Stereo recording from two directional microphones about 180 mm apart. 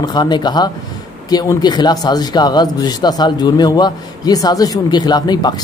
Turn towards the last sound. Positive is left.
turn(degrees=20)  # may be behind; listen again after turning